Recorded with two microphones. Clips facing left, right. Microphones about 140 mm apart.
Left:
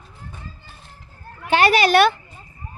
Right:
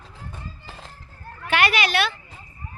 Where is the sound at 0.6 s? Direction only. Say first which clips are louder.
Right 5 dB; 90° right.